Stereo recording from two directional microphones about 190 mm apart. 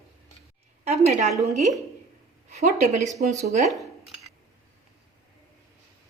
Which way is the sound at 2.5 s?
40° right (ahead or behind).